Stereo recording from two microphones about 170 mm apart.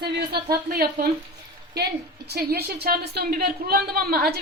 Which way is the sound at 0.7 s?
65° right (ahead or behind).